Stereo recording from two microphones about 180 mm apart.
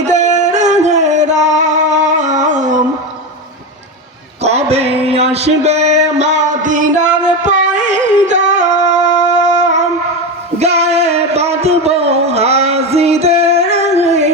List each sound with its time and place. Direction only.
0.1 s singing: 40° right (ahead or behind)
4.4 s a sound: 35° right (ahead or behind)
10.6 s music: 35° right (ahead or behind)